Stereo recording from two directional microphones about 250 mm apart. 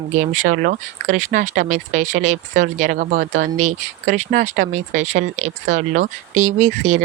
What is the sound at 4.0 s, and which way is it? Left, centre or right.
Speech, right.